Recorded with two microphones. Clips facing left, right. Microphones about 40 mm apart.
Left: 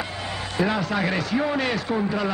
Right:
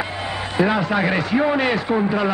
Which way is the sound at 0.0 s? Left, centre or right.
Centre.